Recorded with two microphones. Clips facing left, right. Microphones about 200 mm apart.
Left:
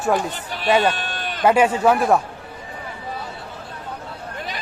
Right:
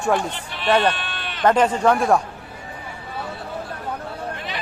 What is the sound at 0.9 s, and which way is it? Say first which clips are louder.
Sheep: left 3 dB; 40° left (ahead or behind).